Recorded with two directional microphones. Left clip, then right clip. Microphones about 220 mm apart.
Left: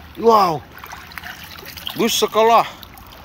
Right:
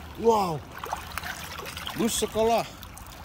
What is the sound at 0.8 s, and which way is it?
Trickle, 35° right (ahead or behind).